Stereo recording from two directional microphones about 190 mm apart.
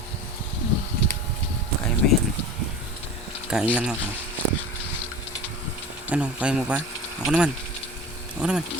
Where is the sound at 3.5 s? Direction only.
5° right (ahead or behind).